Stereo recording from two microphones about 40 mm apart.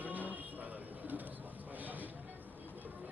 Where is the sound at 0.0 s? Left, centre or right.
Right.